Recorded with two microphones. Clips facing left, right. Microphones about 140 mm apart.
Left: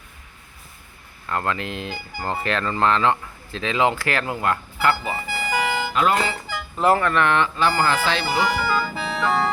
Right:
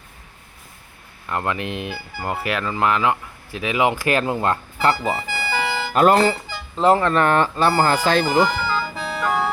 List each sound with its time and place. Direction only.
1.3 s speech: 15° right (ahead or behind)
5.5 s music: 10° left (ahead or behind)
5.9 s speech: 50° right (ahead or behind)
6.7 s speech: 20° right (ahead or behind); by 8.4 s 45° right (ahead or behind)
8.4 s music: 10° left (ahead or behind)